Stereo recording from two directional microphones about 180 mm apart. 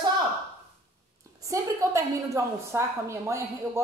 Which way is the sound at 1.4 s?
15° right (ahead or behind).